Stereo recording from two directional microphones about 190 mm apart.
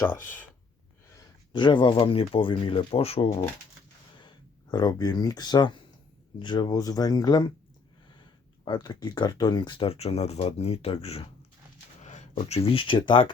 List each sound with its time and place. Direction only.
0.0 s speech: 15° left (ahead or behind)
1.1 s speech: 25° left (ahead or behind)
4.7 s speech: 20° left (ahead or behind)
8.6 s speech: 20° left (ahead or behind)